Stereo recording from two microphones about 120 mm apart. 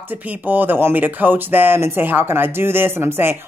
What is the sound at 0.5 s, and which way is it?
Speech, 15° right (ahead or behind).